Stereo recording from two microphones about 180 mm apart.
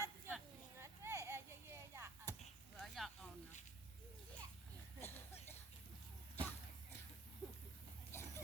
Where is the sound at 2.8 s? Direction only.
Centre (ahead or behind).